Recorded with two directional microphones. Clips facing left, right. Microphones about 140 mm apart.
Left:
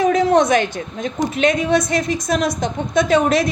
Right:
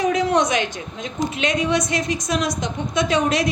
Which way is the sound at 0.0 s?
45° left (ahead or behind).